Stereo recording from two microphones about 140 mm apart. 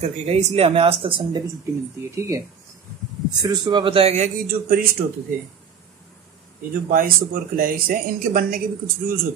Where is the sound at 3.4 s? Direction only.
30° right (ahead or behind); by 4.3 s 50° right (ahead or behind).